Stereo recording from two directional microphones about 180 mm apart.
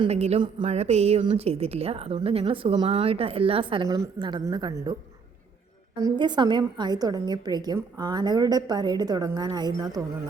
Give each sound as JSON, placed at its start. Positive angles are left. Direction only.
{"t": 0.0, "sound": "a woman's voice", "side_deg": -35}
{"t": 6.0, "sound": "a woman's voice", "side_deg": -25}